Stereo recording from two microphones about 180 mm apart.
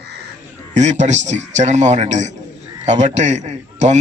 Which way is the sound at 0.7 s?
40° right (ahead or behind).